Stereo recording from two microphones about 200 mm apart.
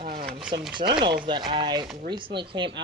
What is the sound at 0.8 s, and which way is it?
Speech, 25° right (ahead or behind).